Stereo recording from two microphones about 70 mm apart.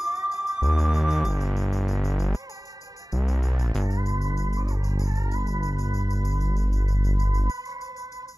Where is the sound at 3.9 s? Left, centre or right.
Right.